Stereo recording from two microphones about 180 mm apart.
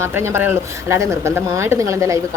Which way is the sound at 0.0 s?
15° right (ahead or behind).